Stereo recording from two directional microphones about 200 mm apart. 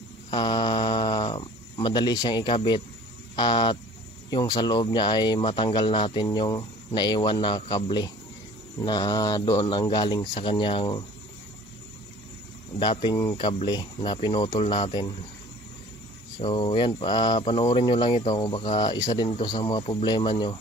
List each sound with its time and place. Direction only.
0.3 s speech: 20° left (ahead or behind)
12.7 s speech: 25° left (ahead or behind)
16.3 s speech: 25° left (ahead or behind)